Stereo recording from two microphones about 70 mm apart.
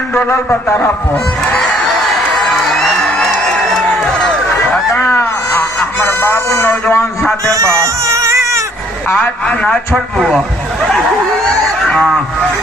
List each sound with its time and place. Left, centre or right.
0.1 s a man's voice: left
1.6 s music: centre
4.9 s a sound: left
7.2 s a sound: centre
7.5 s a sound: right
9.0 s a man's voice: left
9.9 s speech: centre
11.4 s honk: centre
12.0 s speech: centre